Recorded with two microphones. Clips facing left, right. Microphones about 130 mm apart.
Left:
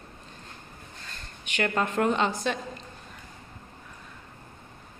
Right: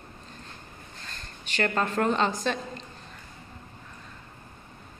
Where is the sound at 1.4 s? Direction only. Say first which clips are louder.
Right 1 dB; 10° left (ahead or behind).